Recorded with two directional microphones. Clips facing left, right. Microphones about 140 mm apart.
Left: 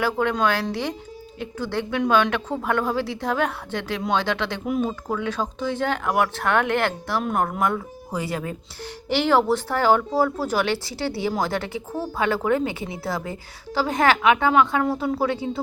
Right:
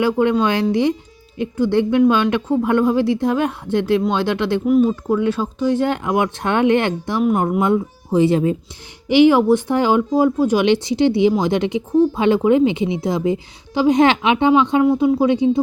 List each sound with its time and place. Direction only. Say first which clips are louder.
0.0 s a woman's voice: right 6 dB; 15° right (ahead or behind)